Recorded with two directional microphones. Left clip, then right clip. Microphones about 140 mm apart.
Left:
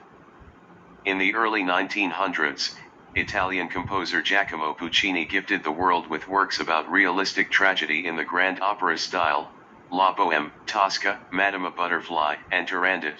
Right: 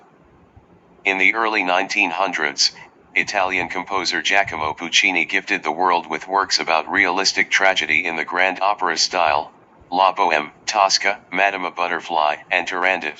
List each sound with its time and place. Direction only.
1.0 s speech: 30° right (ahead or behind)